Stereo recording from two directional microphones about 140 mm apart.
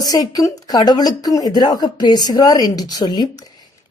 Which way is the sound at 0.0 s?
25° left (ahead or behind).